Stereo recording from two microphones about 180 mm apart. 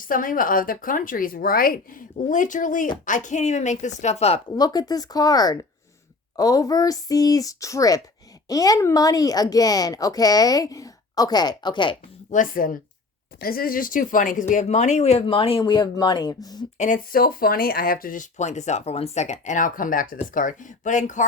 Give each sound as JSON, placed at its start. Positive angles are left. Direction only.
{"t": 0.0, "sound": "speech", "side_deg": 50}
{"t": 4.5, "sound": "speech", "side_deg": 20}
{"t": 12.3, "sound": "speech", "side_deg": 50}
{"t": 16.7, "sound": "speech", "side_deg": 45}